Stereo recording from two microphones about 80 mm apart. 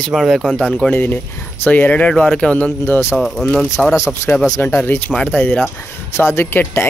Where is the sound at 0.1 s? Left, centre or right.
Centre.